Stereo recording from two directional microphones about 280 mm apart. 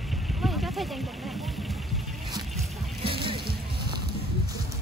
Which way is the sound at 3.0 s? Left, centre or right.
Centre.